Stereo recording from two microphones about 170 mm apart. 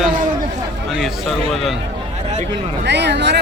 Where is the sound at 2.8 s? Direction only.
85° right.